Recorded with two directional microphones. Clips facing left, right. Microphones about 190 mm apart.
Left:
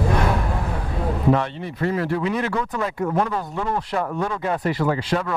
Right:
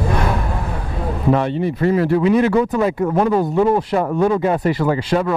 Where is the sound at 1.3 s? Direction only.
10° right (ahead or behind).